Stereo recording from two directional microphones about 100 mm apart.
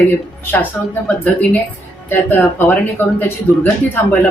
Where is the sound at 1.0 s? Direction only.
15° left (ahead or behind).